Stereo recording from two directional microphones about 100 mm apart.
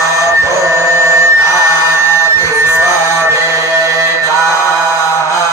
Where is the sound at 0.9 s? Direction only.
30° right (ahead or behind).